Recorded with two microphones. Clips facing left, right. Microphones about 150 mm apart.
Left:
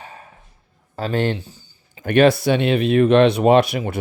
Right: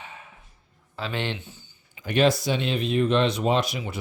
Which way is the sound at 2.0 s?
60° left (ahead or behind).